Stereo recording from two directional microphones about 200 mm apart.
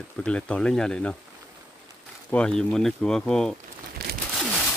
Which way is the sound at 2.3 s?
5° left (ahead or behind).